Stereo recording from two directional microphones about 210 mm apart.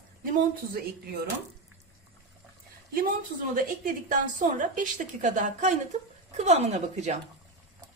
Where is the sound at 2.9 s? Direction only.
40° right (ahead or behind).